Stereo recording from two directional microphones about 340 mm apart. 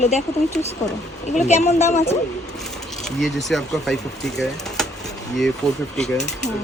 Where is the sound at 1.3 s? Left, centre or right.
Centre.